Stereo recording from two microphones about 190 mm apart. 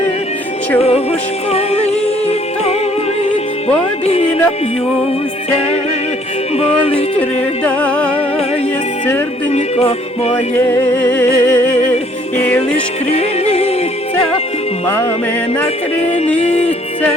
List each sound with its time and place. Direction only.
0.8 s speech: 35° left (ahead or behind)
1.5 s music: 35° left (ahead or behind)
4.0 s music: 30° left (ahead or behind)
6.6 s speech: 30° left (ahead or behind)
7.2 s music: 5° left (ahead or behind)
9.5 s music: 35° left (ahead or behind)
10.6 s music: 10° left (ahead or behind)
13.1 s music: 35° left (ahead or behind)
14.8 s music: 10° left (ahead or behind)
16.4 s music: 35° left (ahead or behind)